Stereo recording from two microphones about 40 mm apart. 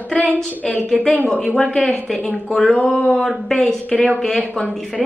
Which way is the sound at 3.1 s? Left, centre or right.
Centre.